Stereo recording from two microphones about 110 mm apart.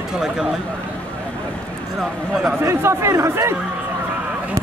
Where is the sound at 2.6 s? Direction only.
25° right (ahead or behind).